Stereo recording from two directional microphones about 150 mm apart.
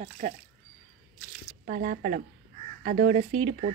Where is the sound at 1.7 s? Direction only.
70° right (ahead or behind).